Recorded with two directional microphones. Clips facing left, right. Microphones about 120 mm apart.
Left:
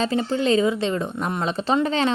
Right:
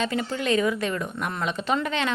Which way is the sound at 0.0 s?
30° left (ahead or behind).